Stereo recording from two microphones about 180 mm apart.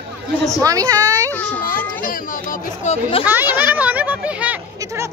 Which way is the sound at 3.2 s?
10° right (ahead or behind).